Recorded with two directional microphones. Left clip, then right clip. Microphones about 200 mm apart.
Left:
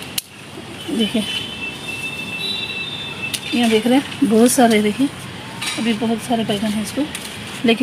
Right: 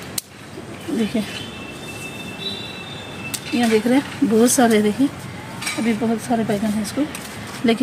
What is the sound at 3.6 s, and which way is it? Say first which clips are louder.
Speech: left 1 dB; 25° left (ahead or behind).